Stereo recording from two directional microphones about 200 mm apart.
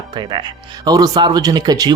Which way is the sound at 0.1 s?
25° right (ahead or behind).